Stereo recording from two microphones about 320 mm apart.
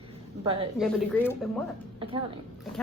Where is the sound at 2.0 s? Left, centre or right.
Centre.